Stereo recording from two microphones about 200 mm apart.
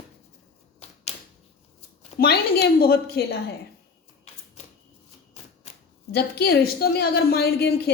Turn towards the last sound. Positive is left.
turn(degrees=50)  # may be behind; listen again after turning